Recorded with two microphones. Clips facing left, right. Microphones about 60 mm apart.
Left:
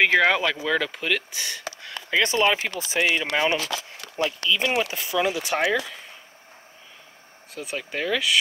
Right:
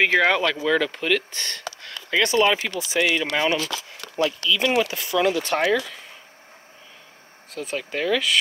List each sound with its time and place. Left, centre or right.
0.0 s speech: centre
1.7 s a sound: centre
2.2 s speech: left
2.8 s speech: left
3.3 s speech: centre
7.5 s speech: centre